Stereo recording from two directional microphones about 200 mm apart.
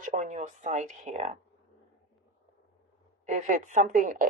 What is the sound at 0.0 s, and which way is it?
Speech, 40° right (ahead or behind).